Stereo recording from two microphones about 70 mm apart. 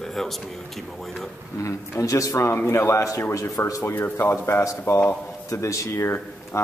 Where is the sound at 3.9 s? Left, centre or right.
Left.